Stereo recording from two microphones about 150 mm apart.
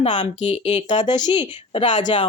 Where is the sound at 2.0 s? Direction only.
30° left (ahead or behind).